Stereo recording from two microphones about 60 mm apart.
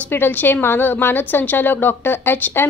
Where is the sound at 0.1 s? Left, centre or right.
Left.